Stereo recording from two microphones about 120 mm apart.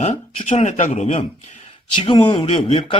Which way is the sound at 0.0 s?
65° left (ahead or behind).